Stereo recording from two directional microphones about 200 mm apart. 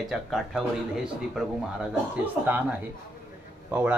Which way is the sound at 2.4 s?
10° right (ahead or behind).